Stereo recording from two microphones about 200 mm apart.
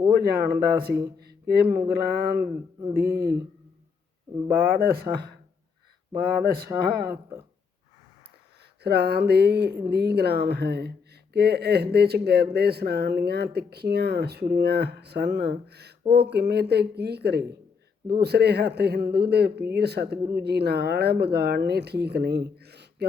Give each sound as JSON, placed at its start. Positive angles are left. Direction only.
{"t": 0.1, "sound": "speech", "side_deg": -50}
{"t": 1.2, "sound": "a sound", "side_deg": -50}
{"t": 1.6, "sound": "speech", "side_deg": -15}
{"t": 1.9, "sound": "speech", "side_deg": -50}
{"t": 3.0, "sound": "speech", "side_deg": -15}
{"t": 4.6, "sound": "speech", "side_deg": -45}
{"t": 8.8, "sound": "speech", "side_deg": -55}
{"t": 22.5, "sound": "a sound", "side_deg": -55}